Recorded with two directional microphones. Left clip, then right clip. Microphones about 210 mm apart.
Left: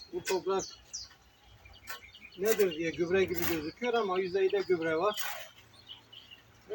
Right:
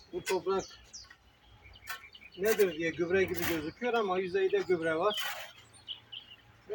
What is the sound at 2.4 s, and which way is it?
Speech, 15° right (ahead or behind).